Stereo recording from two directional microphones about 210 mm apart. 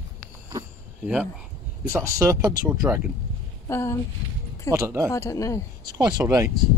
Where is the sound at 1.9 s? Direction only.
15° right (ahead or behind).